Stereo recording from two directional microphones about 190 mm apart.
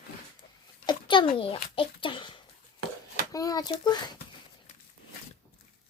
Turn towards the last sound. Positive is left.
turn(degrees=20)  # may be behind; listen again after turning